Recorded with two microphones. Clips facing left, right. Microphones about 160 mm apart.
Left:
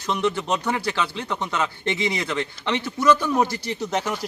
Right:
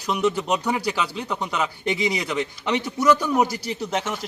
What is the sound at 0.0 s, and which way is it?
Speech, 5° right (ahead or behind).